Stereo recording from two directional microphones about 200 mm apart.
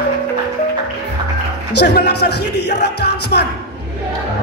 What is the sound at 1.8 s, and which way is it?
Music, 55° left (ahead or behind).